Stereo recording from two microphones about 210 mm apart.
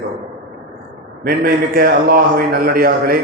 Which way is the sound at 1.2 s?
45° right (ahead or behind).